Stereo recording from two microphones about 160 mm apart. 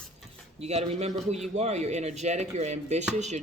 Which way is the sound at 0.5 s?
40° right (ahead or behind).